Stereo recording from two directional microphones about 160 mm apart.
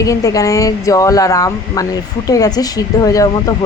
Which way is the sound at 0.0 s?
20° left (ahead or behind).